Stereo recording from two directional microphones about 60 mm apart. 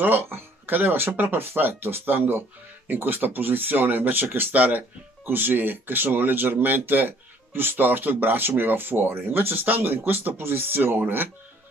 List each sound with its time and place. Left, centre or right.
0.0 s speech: right